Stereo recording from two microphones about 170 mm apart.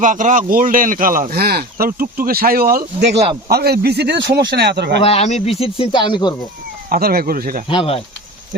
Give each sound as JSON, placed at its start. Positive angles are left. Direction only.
{"t": 0.0, "sound": "a man's voice", "side_deg": -50}
{"t": 5.0, "sound": "speech", "side_deg": 40}
{"t": 6.9, "sound": "a man's voice", "side_deg": -60}
{"t": 7.7, "sound": "speech", "side_deg": 30}